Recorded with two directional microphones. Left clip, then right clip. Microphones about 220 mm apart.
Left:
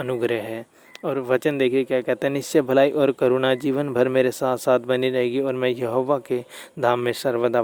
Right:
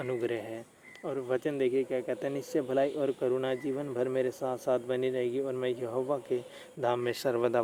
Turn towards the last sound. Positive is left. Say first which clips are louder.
# left 8 dB
turn(degrees=25)  # may be behind; listen again after turning